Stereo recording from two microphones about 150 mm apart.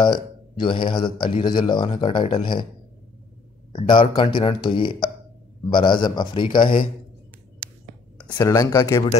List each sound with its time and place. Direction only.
0.0 s speech: 30° left (ahead or behind)
3.7 s speech: 35° left (ahead or behind)
8.4 s speech: 25° left (ahead or behind)